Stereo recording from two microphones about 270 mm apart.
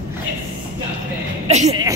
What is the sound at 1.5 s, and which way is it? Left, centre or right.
Speech, right.